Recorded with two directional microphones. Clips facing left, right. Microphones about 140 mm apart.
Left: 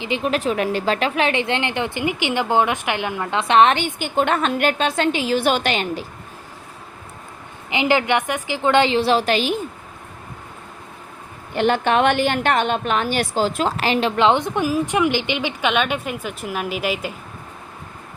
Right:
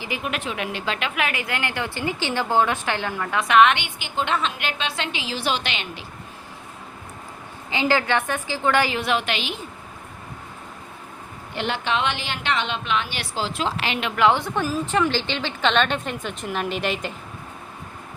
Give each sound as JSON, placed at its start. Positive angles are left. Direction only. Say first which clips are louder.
{"t": 0.2, "sound": "speech", "louder": "left 8 dB", "side_deg": 35}
{"t": 7.7, "sound": "a woman's voice", "louder": "left 3 dB", "side_deg": 20}
{"t": 11.5, "sound": "a woman's voice", "louder": "left 8 dB", "side_deg": 50}
{"t": 14.2, "sound": "a woman's voice", "louder": "right 1 dB", "side_deg": 20}